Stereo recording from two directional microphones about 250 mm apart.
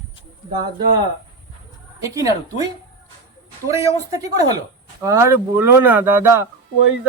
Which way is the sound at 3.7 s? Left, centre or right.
Centre.